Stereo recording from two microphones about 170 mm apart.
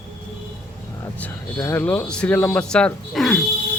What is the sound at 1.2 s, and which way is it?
Speech, 10° left (ahead or behind).